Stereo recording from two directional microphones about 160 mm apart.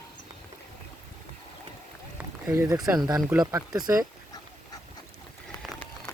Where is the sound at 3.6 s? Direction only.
25° right (ahead or behind).